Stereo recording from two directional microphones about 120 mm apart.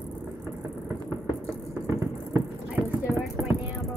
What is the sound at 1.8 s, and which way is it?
Music, 25° right (ahead or behind).